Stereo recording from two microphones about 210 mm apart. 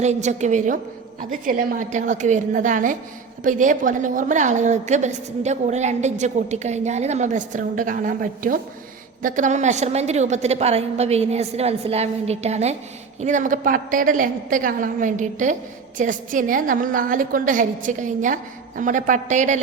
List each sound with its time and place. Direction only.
0.0 s a woman's voice: 35° right (ahead or behind)